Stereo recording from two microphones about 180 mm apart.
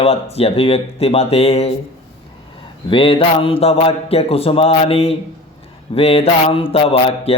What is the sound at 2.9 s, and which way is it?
Speech, 30° left (ahead or behind).